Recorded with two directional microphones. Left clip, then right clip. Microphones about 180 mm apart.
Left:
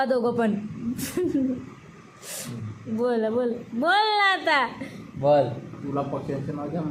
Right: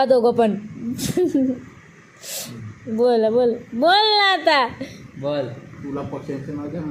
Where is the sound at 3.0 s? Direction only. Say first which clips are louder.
Right 8 dB; 20° right (ahead or behind).